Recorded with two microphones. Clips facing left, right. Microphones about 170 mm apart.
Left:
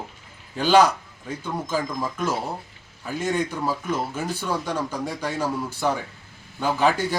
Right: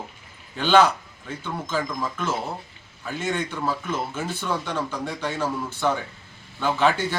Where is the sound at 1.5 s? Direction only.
15° left (ahead or behind).